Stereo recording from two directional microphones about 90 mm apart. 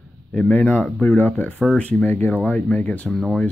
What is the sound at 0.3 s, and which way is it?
Speech, 15° left (ahead or behind).